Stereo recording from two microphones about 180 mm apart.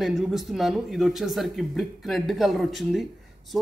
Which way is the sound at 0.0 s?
Centre (ahead or behind).